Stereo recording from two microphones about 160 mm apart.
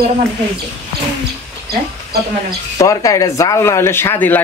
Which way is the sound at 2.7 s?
20° left (ahead or behind).